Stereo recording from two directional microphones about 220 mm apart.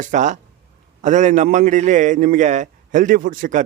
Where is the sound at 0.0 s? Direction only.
35° right (ahead or behind).